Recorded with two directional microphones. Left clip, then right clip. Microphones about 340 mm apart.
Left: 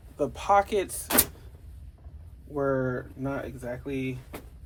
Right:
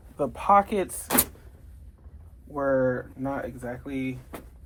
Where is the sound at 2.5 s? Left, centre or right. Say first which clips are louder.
Right 4 dB; centre.